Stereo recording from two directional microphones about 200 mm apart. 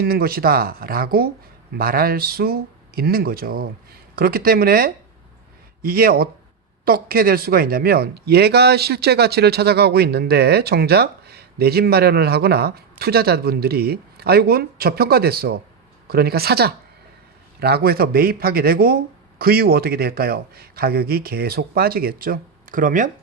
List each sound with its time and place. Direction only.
0.0 s a man's voice: 50° right (ahead or behind)